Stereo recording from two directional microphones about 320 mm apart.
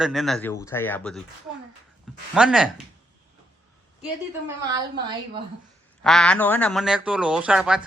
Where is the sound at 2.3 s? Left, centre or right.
Centre.